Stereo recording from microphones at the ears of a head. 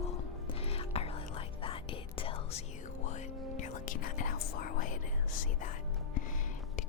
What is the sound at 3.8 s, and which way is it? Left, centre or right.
Whispering, left.